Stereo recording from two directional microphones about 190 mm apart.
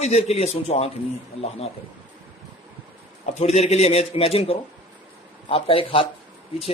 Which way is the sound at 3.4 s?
35° left (ahead or behind).